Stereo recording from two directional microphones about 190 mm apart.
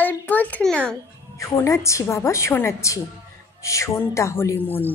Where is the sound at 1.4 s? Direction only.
15° left (ahead or behind).